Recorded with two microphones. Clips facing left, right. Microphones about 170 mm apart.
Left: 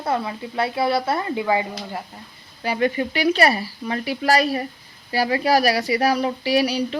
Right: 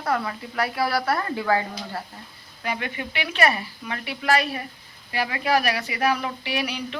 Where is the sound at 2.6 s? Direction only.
35° left (ahead or behind).